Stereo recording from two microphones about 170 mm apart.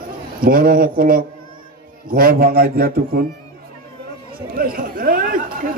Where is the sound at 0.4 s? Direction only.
60° right (ahead or behind).